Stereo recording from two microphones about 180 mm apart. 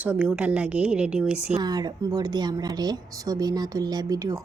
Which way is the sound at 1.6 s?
20° right (ahead or behind).